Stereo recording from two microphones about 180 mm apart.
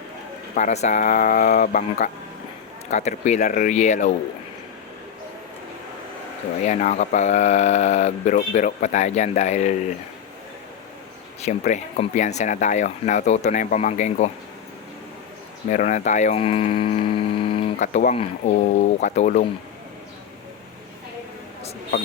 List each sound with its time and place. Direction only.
0.5 s speech: 40° left (ahead or behind)
6.6 s speech: 40° left (ahead or behind)
11.4 s speech: 40° left (ahead or behind)
15.7 s speech: 40° left (ahead or behind)
17.8 s speech: 45° left (ahead or behind)